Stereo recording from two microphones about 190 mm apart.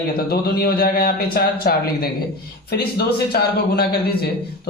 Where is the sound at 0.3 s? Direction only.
55° left (ahead or behind).